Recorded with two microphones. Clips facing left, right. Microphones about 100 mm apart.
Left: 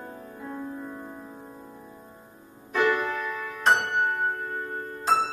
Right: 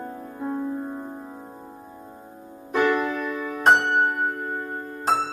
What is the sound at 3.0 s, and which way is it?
Music, 5° right (ahead or behind).